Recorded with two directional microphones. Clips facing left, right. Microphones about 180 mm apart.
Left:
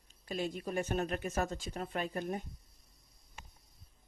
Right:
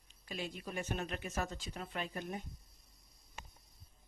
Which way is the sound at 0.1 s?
45° left (ahead or behind).